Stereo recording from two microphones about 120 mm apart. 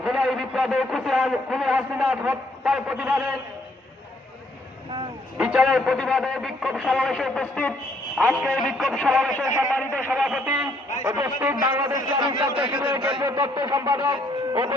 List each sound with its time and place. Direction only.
0.0 s a man's voice: 5° right (ahead or behind)
5.4 s a man's voice: 5° right (ahead or behind)
8.2 s a man's voice: 5° right (ahead or behind)
9.7 s a man's voice: 15° left (ahead or behind)
10.1 s a man's voice: 5° right (ahead or behind)
11.0 s a man's voice: 25° right (ahead or behind)
12.1 s a man's voice: 40° right (ahead or behind)
12.7 s a man's voice: 15° right (ahead or behind)
13.0 s a man's voice: 45° right (ahead or behind)
13.3 s a man's voice: 35° right (ahead or behind)